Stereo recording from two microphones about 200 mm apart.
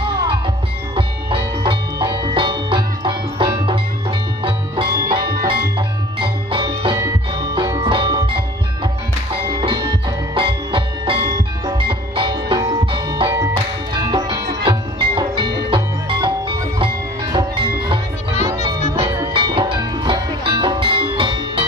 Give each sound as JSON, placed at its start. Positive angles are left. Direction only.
{"t": 0.0, "sound": "music", "side_deg": -25}